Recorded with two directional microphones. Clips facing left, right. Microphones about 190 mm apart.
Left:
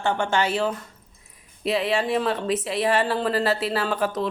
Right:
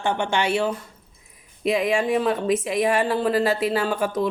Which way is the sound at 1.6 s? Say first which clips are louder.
Right 2 dB; 10° right (ahead or behind).